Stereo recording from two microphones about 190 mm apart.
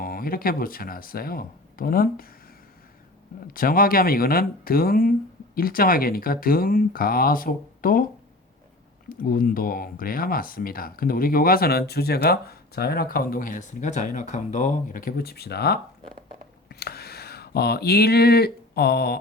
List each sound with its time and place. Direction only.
0.0 s speech: 50° left (ahead or behind)
3.4 s speech: 50° left (ahead or behind)
9.0 s speech: 50° left (ahead or behind)